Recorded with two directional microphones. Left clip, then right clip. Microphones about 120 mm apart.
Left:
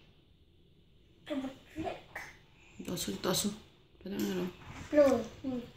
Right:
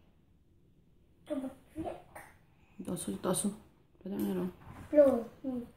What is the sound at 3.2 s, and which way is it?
Speech, 25° right (ahead or behind).